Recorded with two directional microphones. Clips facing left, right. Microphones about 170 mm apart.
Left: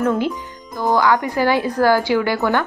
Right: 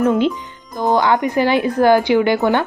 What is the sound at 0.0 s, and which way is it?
Speech, 20° right (ahead or behind).